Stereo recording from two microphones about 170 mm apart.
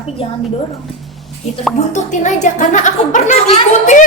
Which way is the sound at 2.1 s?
45° left (ahead or behind).